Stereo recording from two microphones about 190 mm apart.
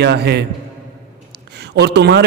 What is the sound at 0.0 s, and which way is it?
Speech, 60° right (ahead or behind).